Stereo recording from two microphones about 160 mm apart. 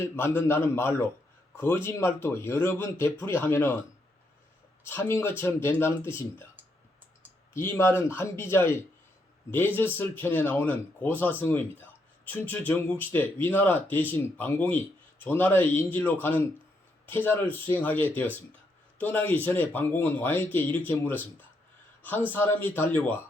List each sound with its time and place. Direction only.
0.0 s speech: 15° left (ahead or behind)
4.8 s speech: 15° left (ahead or behind)
7.5 s speech: 15° left (ahead or behind)
22.3 s speech: 15° left (ahead or behind)